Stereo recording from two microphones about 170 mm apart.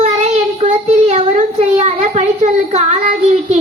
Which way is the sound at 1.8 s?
40° right (ahead or behind).